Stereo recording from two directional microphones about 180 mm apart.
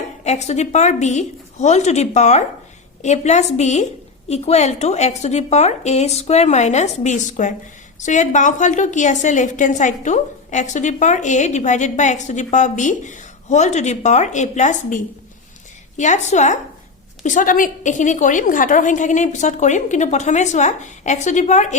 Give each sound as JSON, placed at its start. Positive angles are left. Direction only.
{"t": 0.3, "sound": "a woman's voice", "side_deg": 40}